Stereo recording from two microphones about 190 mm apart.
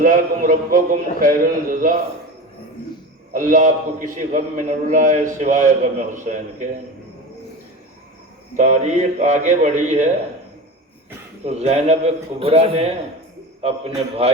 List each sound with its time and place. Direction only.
0.0 s a man's voice: 45° right (ahead or behind)
3.3 s a man's voice: 45° right (ahead or behind)
8.5 s a man's voice: 40° right (ahead or behind)
11.4 s a man's voice: 35° right (ahead or behind)